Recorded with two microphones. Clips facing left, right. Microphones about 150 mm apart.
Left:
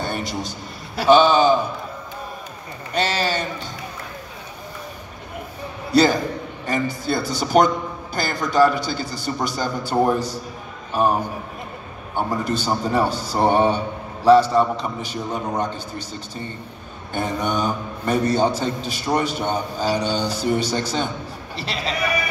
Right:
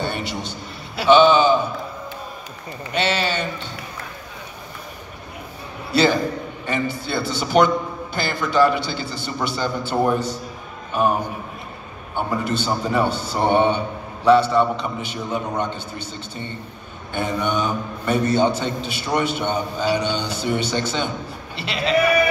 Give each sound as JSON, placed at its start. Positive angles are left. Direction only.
{"t": 0.0, "sound": "a man's voice", "side_deg": 40}
{"t": 2.9, "sound": "a man's voice", "side_deg": 40}
{"t": 6.6, "sound": "a man's voice", "side_deg": 40}
{"t": 12.2, "sound": "a man's voice", "side_deg": 40}
{"t": 17.1, "sound": "a man's voice", "side_deg": 40}